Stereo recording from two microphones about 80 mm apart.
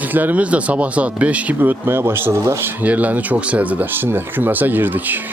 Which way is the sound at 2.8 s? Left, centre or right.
Centre.